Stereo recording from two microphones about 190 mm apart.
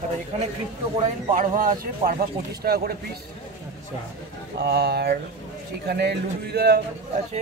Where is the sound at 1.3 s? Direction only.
45° right (ahead or behind).